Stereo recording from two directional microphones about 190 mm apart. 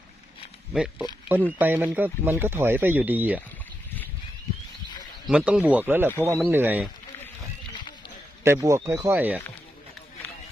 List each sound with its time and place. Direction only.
0.7 s speech: 5° right (ahead or behind)
5.3 s speech: 5° right (ahead or behind)
8.4 s speech: 15° right (ahead or behind)